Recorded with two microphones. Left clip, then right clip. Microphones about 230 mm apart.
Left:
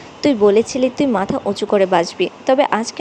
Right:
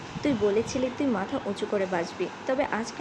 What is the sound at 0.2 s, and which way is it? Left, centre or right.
A woman's voice, left.